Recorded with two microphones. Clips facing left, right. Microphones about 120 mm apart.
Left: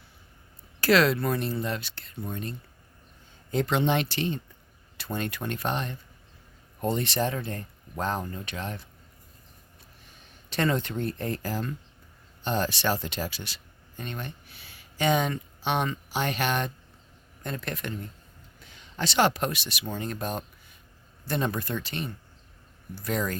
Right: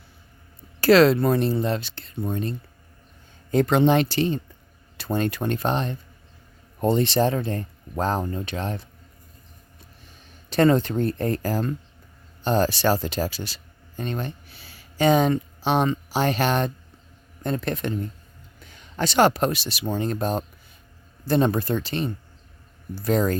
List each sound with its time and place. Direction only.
0.8 s speech: 30° right (ahead or behind)
3.5 s speech: 45° right (ahead or behind)
10.5 s speech: 35° right (ahead or behind)
18.6 s speech: 50° right (ahead or behind)